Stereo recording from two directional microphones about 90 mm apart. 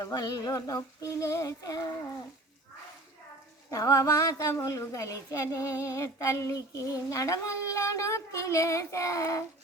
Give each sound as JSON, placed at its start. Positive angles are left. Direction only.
{"t": 0.0, "sound": "a woman's voice", "side_deg": 40}
{"t": 3.7, "sound": "a woman's voice", "side_deg": 40}